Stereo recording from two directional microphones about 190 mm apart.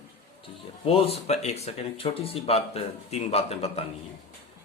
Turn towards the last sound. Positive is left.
turn(degrees=30)  # may be behind; listen again after turning